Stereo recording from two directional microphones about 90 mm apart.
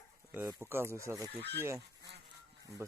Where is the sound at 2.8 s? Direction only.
30° right (ahead or behind).